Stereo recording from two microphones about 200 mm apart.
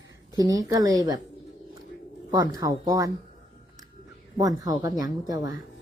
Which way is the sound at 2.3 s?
20° right (ahead or behind).